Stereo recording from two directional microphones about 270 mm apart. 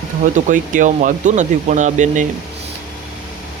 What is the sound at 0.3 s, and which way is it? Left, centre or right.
Speech, right.